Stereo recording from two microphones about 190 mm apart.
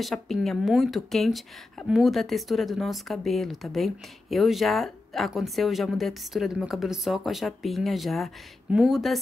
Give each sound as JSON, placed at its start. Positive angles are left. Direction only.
{"t": 0.0, "sound": "a woman's voice", "side_deg": 0}